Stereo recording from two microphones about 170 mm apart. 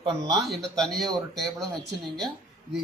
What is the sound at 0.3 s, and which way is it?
Speech, centre (ahead or behind).